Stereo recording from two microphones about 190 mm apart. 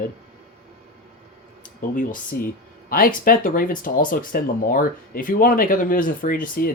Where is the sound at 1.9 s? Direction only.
45° left (ahead or behind).